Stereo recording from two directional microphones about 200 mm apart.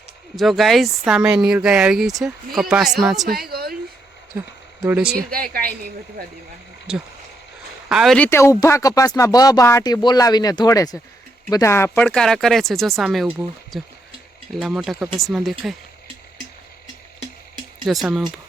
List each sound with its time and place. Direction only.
0.3 s speech: centre (ahead or behind)
3.2 s a woman's voice: 50° right (ahead or behind)
4.4 s speech: 10° right (ahead or behind)
5.1 s speech: 45° right (ahead or behind)
7.9 s speech: centre (ahead or behind)
17.8 s speech: centre (ahead or behind)